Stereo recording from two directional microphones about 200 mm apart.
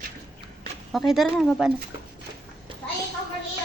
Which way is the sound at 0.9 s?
Centre (ahead or behind).